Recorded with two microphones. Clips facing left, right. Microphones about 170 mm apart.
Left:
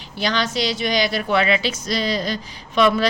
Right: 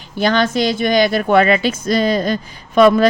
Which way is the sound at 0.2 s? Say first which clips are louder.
Right 7 dB; 50° right (ahead or behind).